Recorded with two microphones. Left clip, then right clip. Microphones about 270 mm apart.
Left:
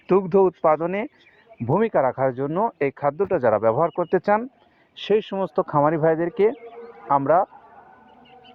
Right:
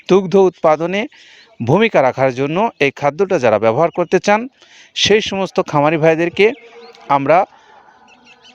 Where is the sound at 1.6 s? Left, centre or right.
Right.